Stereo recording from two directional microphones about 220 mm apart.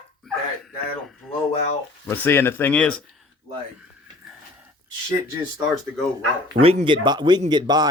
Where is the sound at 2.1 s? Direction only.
10° left (ahead or behind).